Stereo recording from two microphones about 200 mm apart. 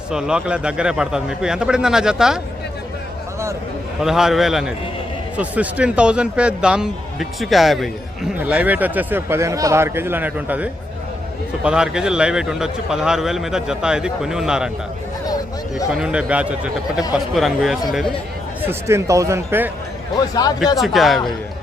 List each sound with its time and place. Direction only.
0.1 s a man's voice: 5° right (ahead or behind)
4.0 s a man's voice: centre (ahead or behind)
15.9 s a man's voice: 5° right (ahead or behind)
18.6 s a man's voice: 10° right (ahead or behind)
20.1 s a man's voice: 20° left (ahead or behind)
20.8 s a man's voice: centre (ahead or behind)